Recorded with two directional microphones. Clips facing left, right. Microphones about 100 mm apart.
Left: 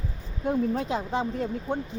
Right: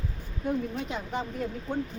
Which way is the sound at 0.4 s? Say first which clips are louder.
Left 5 dB; 30° left (ahead or behind).